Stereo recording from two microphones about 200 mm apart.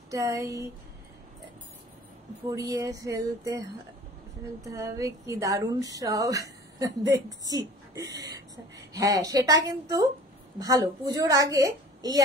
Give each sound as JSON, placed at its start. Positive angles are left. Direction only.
{"t": 0.1, "sound": "speech", "side_deg": -15}
{"t": 2.4, "sound": "a woman's voice", "side_deg": -15}
{"t": 11.1, "sound": "speech", "side_deg": -20}